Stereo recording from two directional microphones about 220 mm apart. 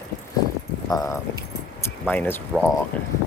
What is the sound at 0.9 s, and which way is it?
Speech, 15° left (ahead or behind).